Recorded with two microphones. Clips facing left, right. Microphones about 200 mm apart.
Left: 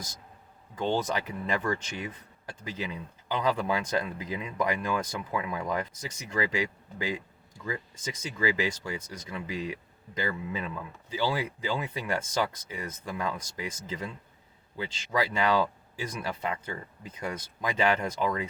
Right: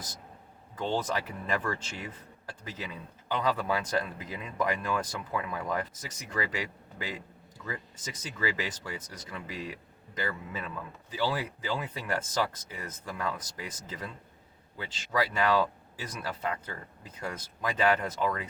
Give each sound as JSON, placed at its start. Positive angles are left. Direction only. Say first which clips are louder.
{"t": 1.0, "sound": "speech", "louder": "left 2 dB", "side_deg": 15}
{"t": 8.4, "sound": "speech", "louder": "left 5 dB", "side_deg": 15}